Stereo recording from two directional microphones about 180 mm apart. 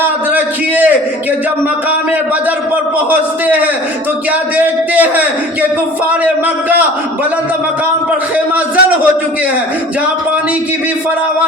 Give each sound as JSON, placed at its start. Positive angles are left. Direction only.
{"t": 0.0, "sound": "a sound", "side_deg": -10}
{"t": 3.1, "sound": "speech", "side_deg": -10}
{"t": 8.5, "sound": "a man's voice", "side_deg": -10}